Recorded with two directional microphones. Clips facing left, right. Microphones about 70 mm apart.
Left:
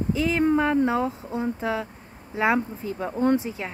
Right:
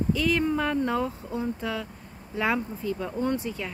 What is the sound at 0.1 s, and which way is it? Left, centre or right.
Speech, left.